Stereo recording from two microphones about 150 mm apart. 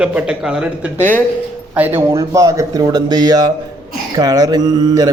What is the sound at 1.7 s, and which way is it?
Speech, 15° right (ahead or behind).